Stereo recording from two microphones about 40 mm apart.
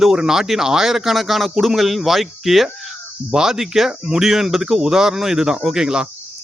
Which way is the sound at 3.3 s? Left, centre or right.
Centre.